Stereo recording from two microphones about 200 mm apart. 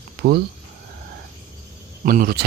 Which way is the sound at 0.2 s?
50° right (ahead or behind).